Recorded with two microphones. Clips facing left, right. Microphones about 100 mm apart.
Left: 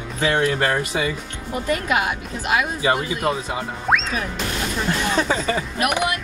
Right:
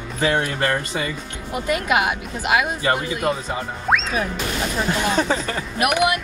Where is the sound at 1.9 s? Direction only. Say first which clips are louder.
Right 2 dB; 20° right (ahead or behind).